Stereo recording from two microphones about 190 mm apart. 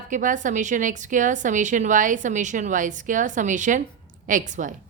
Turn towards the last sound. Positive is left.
turn(degrees=-40)  # may be behind; listen again after turning